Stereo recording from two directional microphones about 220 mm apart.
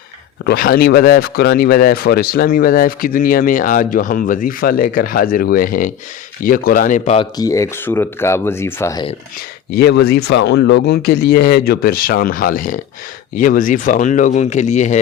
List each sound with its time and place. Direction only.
0.4 s a man's voice: 45° left (ahead or behind)
7.3 s speech: 15° left (ahead or behind)
9.7 s a man's voice: 45° left (ahead or behind)